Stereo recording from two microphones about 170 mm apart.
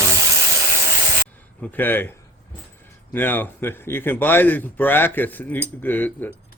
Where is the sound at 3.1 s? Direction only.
10° left (ahead or behind).